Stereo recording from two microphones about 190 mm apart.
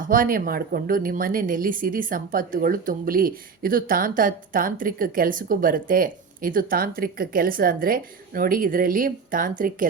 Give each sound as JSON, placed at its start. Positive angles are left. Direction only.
{"t": 0.0, "sound": "speech", "side_deg": -45}